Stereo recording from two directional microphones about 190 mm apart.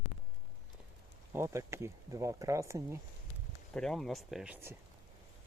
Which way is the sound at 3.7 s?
Centre (ahead or behind).